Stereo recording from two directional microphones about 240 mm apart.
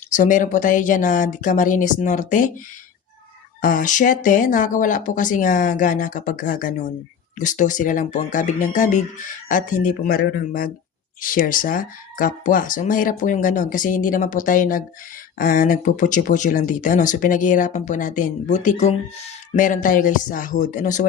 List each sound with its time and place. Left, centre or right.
0.1 s speech: left
3.6 s speech: left